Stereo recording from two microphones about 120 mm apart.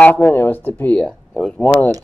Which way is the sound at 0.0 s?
15° left (ahead or behind).